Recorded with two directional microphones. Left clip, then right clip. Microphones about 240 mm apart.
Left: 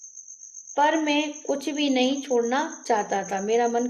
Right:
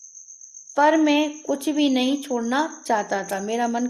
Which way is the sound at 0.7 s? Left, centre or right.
Right.